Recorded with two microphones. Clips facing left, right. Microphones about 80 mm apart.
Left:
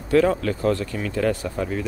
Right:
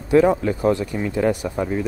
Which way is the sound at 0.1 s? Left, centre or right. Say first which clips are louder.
Right 3 dB; centre.